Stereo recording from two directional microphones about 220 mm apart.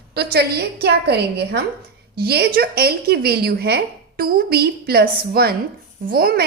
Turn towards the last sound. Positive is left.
turn(degrees=-45)  # may be behind; listen again after turning